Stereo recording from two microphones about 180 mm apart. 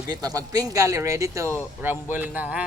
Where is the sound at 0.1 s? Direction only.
20° right (ahead or behind).